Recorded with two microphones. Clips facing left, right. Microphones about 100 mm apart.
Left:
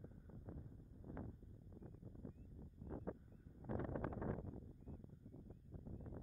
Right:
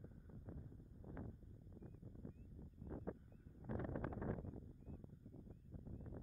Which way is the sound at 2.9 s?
35° left (ahead or behind).